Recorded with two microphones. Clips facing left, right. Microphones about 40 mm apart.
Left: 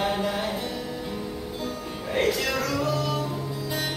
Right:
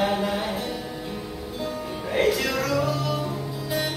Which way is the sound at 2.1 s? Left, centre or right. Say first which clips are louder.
Right 2 dB; centre.